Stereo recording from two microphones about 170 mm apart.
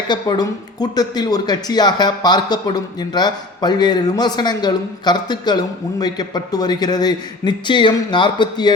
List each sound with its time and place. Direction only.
0.1 s speech: 25° left (ahead or behind)